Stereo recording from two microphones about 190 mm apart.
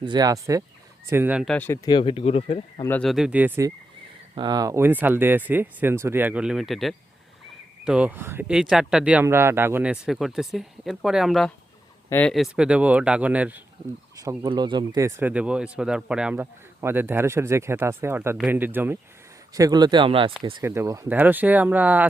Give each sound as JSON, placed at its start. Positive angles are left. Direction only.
{"t": 0.0, "sound": "speech", "side_deg": -20}
{"t": 1.5, "sound": "speech", "side_deg": 10}
{"t": 2.8, "sound": "speech", "side_deg": 10}
{"t": 3.1, "sound": "speech", "side_deg": -5}
{"t": 4.4, "sound": "speech", "side_deg": -20}
{"t": 12.3, "sound": "speech", "side_deg": -5}
{"t": 14.2, "sound": "speech", "side_deg": -20}